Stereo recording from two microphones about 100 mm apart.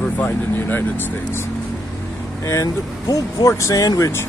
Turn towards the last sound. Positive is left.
turn(degrees=35)  # may be behind; listen again after turning